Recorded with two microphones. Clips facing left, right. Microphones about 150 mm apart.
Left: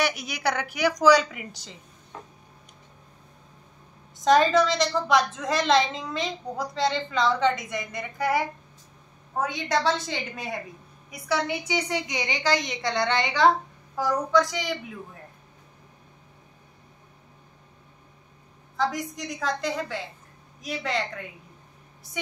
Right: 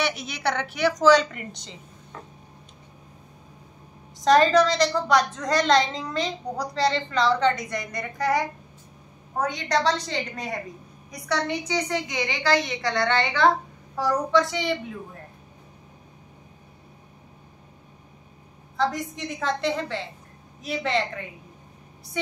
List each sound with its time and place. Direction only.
0.0 s a woman's voice: 10° left (ahead or behind)
4.2 s a woman's voice: 5° left (ahead or behind)
13.9 s a woman's voice: centre (ahead or behind)
18.8 s a woman's voice: centre (ahead or behind)